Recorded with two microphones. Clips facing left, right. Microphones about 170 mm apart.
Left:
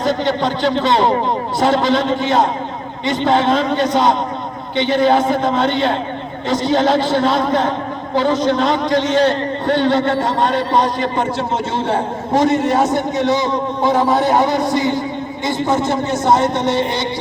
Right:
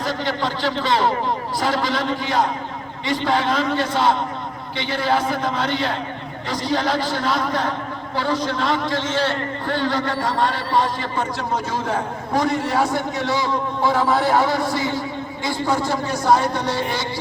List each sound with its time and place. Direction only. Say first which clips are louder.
0.0 s a man's voice: left 6 dB; 20° left (ahead or behind)